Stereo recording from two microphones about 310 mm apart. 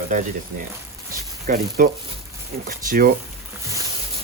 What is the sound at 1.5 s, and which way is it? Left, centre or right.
Speech, right.